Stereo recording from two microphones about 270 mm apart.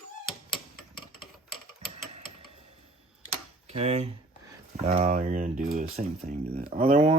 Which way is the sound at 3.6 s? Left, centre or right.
Right.